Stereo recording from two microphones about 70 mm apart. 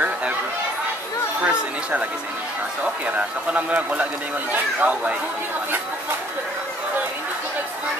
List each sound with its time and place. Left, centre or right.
1.4 s speech: centre